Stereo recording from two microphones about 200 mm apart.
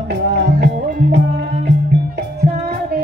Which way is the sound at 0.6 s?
55° right (ahead or behind).